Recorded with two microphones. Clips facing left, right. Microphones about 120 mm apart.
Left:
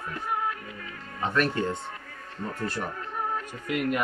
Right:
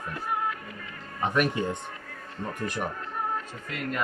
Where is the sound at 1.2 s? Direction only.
15° right (ahead or behind).